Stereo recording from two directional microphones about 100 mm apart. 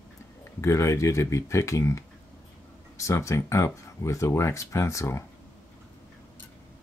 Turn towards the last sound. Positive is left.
turn(degrees=30)  # may be behind; listen again after turning